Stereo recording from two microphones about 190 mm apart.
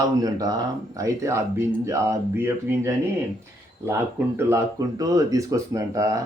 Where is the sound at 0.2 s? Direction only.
20° right (ahead or behind).